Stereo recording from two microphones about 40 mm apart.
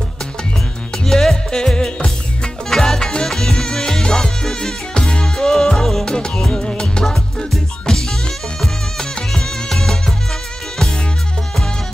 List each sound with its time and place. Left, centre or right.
0.9 s music: centre